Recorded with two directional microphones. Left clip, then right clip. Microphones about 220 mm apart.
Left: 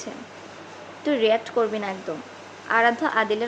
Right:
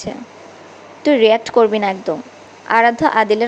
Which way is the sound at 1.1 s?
25° right (ahead or behind).